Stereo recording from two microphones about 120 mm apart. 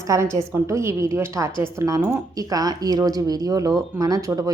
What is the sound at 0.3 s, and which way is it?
Speech, 25° right (ahead or behind).